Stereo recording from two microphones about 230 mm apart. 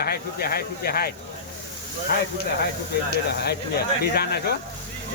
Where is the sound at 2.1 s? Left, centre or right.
Left.